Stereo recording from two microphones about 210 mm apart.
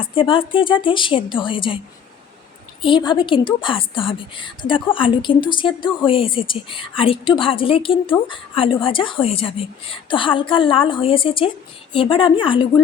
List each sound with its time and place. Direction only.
0.0 s a woman's voice: 25° left (ahead or behind)
2.8 s a woman's voice: 25° left (ahead or behind)